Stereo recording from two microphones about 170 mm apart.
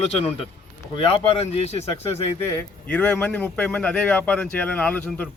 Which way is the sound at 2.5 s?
10° left (ahead or behind).